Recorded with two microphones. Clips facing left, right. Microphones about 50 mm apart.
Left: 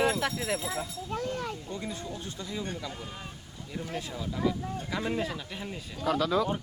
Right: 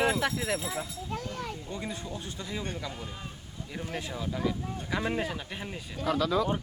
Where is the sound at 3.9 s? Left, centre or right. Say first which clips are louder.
Right 1 dB; right.